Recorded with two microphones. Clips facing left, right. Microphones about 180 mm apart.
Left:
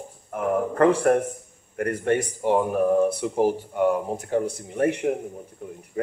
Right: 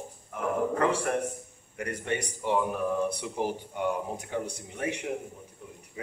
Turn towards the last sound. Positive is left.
turn(degrees=55)  # may be behind; listen again after turning